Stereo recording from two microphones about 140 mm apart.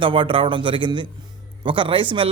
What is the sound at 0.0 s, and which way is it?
A man's voice, 35° right (ahead or behind).